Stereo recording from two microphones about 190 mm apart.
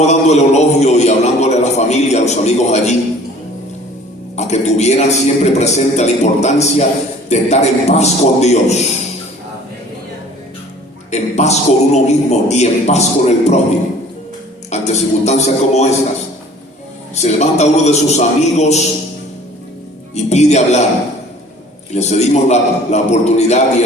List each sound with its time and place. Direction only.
0.0 s a man's voice: 35° left (ahead or behind)
4.4 s a man's voice: 35° left (ahead or behind)
11.1 s a man's voice: 35° left (ahead or behind)
14.7 s a man's voice: 35° left (ahead or behind)
17.2 s a man's voice: 35° left (ahead or behind)
20.1 s a man's voice: 35° left (ahead or behind)
21.9 s a man's voice: 35° left (ahead or behind)